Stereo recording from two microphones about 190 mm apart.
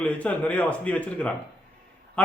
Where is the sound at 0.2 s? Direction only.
5° left (ahead or behind).